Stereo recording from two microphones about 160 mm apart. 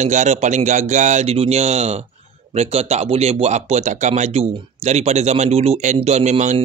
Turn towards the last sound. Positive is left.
turn(degrees=-45)  # may be behind; listen again after turning